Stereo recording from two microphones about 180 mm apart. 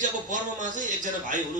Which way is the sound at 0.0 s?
45° right (ahead or behind).